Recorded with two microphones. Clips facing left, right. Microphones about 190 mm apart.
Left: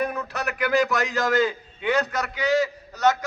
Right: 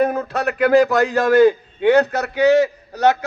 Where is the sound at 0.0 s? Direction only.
55° right (ahead or behind).